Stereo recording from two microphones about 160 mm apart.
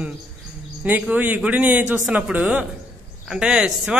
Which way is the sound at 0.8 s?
10° right (ahead or behind).